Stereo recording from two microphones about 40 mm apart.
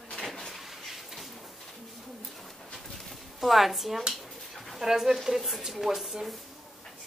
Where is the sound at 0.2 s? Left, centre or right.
Centre.